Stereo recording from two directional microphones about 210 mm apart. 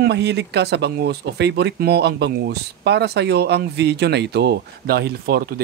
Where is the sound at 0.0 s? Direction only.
55° right (ahead or behind).